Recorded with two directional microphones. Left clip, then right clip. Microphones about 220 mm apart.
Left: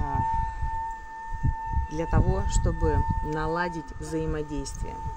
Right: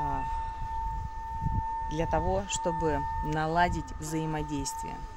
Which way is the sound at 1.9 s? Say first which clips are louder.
Right 1 dB; 20° right (ahead or behind).